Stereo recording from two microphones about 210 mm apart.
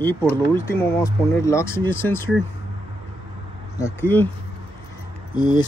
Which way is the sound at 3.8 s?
15° left (ahead or behind).